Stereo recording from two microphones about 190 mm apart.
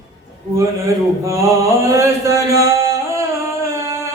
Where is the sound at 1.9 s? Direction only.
15° right (ahead or behind).